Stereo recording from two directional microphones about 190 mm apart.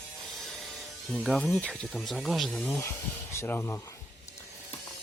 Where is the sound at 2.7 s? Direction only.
15° left (ahead or behind).